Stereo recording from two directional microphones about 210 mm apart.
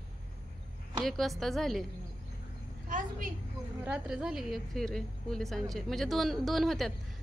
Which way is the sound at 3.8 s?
5° right (ahead or behind).